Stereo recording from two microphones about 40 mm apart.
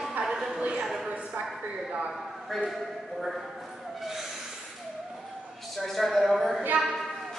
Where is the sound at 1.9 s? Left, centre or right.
Right.